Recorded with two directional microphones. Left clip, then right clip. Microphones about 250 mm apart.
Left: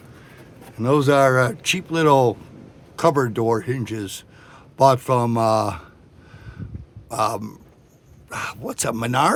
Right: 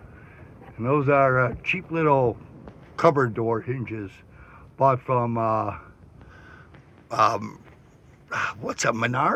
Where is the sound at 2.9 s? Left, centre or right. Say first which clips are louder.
Left 1 dB; left.